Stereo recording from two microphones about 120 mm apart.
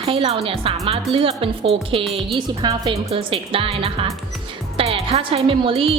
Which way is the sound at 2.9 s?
50° right (ahead or behind).